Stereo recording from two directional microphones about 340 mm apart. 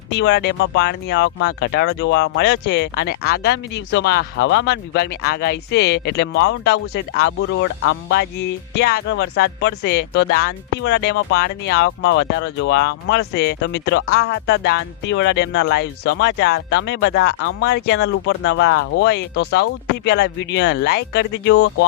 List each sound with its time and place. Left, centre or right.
0.1 s speech: left